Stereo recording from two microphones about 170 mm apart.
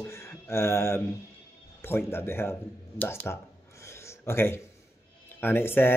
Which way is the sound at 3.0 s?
15° left (ahead or behind).